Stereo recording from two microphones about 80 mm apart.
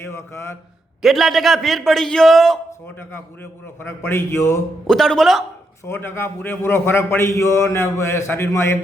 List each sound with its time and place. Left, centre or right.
0.0 s a man's voice: left
1.0 s a man's voice: centre
2.8 s a man's voice: left
4.9 s a man's voice: centre
5.8 s a man's voice: left